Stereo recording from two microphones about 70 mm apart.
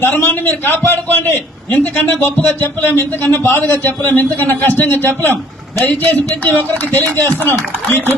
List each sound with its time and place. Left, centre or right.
0.0 s speech: left